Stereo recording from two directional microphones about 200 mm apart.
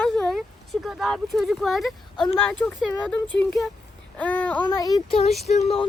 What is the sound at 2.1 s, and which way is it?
Speech, 25° left (ahead or behind).